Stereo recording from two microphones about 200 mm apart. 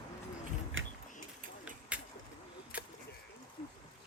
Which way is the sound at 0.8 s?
75° right (ahead or behind).